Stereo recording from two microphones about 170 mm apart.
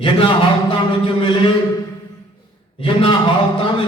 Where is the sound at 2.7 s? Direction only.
30° left (ahead or behind).